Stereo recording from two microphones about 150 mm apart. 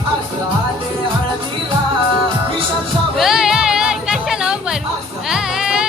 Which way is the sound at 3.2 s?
Centre (ahead or behind).